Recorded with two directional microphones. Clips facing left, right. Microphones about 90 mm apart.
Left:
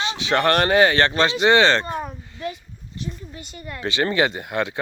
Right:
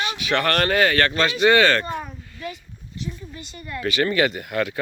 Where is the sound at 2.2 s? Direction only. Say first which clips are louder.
Left 3 dB; 25° left (ahead or behind).